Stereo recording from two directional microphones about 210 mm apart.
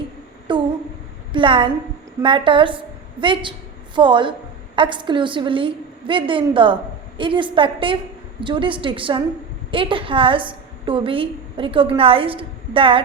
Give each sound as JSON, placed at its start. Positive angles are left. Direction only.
{"t": 0.5, "sound": "a woman's voice", "side_deg": -25}